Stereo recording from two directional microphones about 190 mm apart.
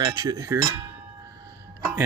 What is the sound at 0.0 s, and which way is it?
Speech, 20° right (ahead or behind).